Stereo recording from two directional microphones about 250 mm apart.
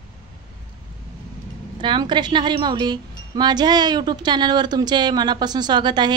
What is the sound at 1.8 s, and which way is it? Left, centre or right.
A woman's voice, centre.